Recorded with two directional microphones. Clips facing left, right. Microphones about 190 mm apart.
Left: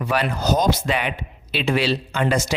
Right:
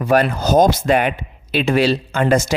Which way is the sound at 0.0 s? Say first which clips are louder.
Right 6 dB; 45° right (ahead or behind).